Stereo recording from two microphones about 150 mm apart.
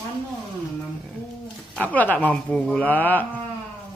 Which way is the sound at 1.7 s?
10° left (ahead or behind).